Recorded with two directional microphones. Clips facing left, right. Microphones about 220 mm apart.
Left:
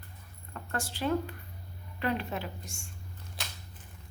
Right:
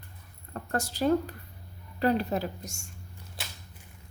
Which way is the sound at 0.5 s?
40° right (ahead or behind).